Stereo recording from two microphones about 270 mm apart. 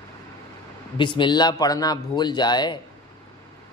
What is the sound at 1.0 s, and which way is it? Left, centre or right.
Speech, centre.